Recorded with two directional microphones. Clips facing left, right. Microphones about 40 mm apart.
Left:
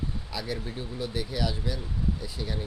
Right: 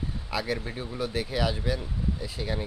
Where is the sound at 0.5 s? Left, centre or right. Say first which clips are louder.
Right 1 dB; right.